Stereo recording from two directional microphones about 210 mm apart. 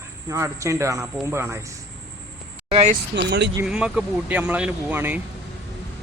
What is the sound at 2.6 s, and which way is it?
Speech, 30° right (ahead or behind).